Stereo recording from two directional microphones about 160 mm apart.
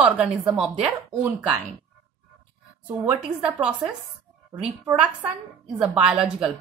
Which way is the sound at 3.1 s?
5° right (ahead or behind).